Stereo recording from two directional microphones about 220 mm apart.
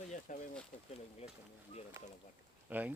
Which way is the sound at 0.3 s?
35° left (ahead or behind).